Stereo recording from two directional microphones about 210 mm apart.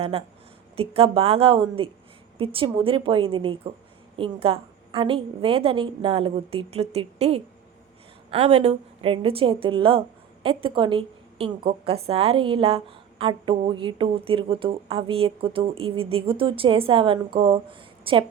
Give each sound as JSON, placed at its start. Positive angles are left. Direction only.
{"t": 0.8, "sound": "a woman's voice", "side_deg": -25}